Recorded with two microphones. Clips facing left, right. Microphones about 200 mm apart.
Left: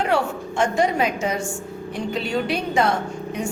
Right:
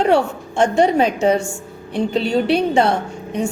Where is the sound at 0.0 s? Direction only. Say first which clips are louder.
Right 6 dB; 30° right (ahead or behind).